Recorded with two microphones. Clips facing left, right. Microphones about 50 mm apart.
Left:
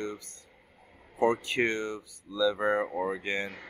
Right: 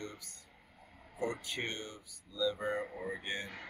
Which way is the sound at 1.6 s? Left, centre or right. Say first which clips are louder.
Left 11 dB; left.